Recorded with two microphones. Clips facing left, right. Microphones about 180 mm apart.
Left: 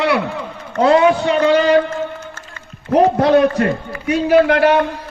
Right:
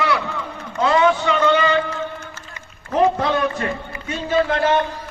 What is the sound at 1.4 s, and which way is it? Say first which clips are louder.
Speech: left 5 dB; 40° left (ahead or behind).